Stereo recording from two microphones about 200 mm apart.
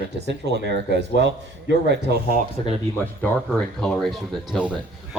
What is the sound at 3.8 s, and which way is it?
Speech, centre (ahead or behind).